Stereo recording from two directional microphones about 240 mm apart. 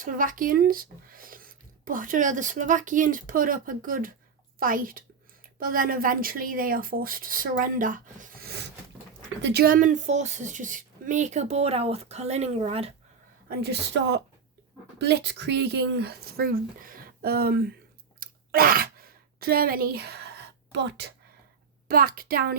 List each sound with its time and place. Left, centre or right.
0.0 s speech: right
13.5 s speech: right
18.2 s a sound: right
21.8 s speech: right